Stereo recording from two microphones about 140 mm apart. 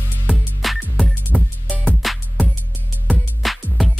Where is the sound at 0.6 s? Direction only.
Centre (ahead or behind).